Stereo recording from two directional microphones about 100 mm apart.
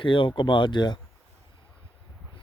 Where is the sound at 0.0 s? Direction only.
60° left (ahead or behind).